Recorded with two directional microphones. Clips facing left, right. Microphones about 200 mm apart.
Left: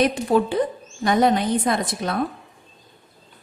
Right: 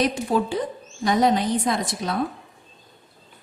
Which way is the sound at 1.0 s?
55° left (ahead or behind).